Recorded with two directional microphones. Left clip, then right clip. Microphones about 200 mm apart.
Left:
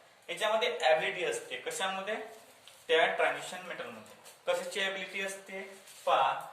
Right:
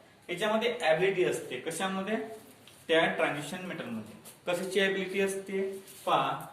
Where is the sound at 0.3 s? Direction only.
20° left (ahead or behind).